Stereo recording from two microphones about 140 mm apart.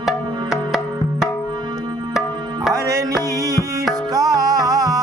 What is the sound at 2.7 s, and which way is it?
Music, 25° right (ahead or behind).